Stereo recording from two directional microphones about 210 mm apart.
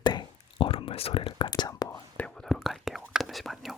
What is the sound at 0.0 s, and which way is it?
Whispering, 20° left (ahead or behind).